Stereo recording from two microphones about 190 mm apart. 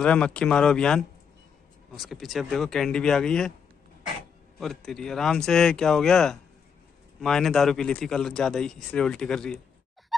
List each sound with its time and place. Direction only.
0.0 s a man's voice: 5° left (ahead or behind)
4.6 s a man's voice: centre (ahead or behind)